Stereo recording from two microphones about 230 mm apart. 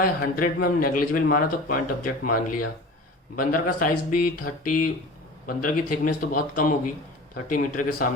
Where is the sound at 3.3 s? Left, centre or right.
Left.